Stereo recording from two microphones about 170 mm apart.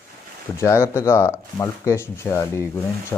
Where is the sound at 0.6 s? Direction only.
15° left (ahead or behind).